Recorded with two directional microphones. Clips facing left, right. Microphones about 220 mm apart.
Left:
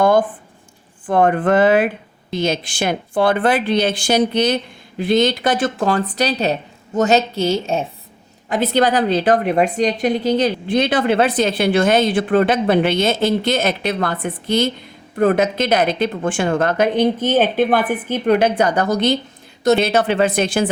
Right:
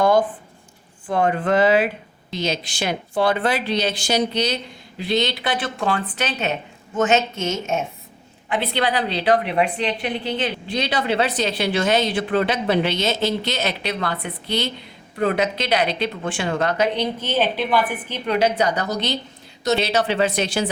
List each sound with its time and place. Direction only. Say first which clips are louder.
1.0 s a woman's voice: left 5 dB; 55° left (ahead or behind)